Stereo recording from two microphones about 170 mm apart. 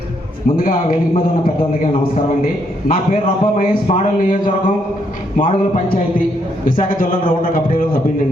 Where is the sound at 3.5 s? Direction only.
50° left (ahead or behind).